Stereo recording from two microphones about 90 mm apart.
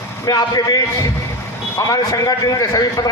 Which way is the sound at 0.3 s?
45° left (ahead or behind).